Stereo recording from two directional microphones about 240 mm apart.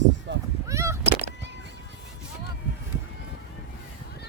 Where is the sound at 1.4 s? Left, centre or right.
Right.